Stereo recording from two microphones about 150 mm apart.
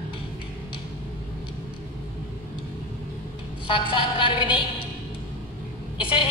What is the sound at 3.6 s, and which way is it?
Speech, 35° left (ahead or behind).